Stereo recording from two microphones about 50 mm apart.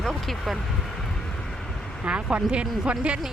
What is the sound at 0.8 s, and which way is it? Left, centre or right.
Vehicle, centre.